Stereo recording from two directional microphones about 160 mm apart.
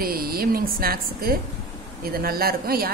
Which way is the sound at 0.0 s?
65° right (ahead or behind).